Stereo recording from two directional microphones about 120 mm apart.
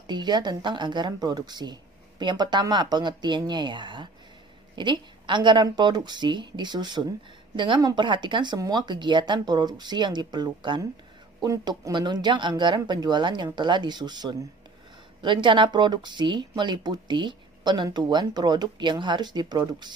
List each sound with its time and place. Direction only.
0.0 s a woman's voice: 40° right (ahead or behind)